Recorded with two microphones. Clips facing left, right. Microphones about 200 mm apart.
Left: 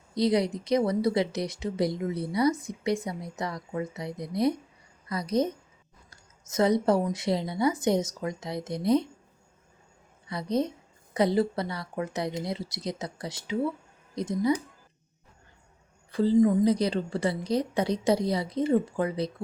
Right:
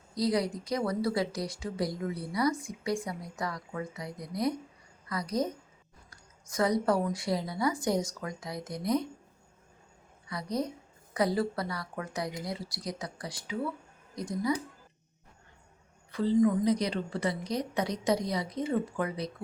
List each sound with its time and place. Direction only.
0.1 s a woman's voice: 25° left (ahead or behind)
10.2 s speech: 25° left (ahead or behind)
16.4 s speech: 30° left (ahead or behind)